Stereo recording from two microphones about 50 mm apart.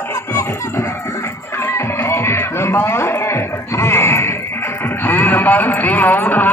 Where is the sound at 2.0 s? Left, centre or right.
Left.